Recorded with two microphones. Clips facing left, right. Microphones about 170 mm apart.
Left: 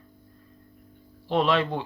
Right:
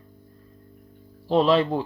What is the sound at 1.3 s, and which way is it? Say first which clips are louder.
Speech: right 4 dB; 35° right (ahead or behind).